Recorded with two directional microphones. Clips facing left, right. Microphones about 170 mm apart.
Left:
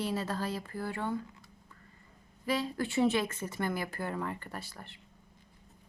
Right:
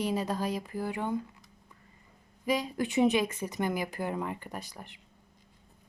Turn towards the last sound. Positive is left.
turn(degrees=-15)  # may be behind; listen again after turning